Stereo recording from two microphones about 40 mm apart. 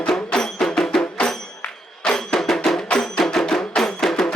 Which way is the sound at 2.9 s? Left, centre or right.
Centre.